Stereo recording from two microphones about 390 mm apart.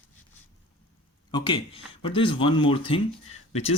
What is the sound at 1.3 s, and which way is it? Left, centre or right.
Speech, centre.